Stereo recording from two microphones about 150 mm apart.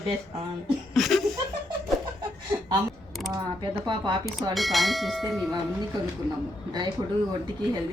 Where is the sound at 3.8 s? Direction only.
30° right (ahead or behind).